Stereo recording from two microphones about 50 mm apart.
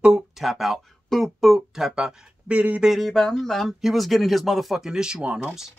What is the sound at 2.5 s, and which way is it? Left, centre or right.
Speech, right.